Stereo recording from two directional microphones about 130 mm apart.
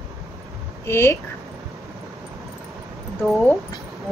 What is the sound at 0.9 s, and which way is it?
Speech, 20° left (ahead or behind).